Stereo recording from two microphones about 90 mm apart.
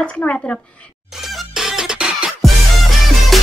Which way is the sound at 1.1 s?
Centre (ahead or behind).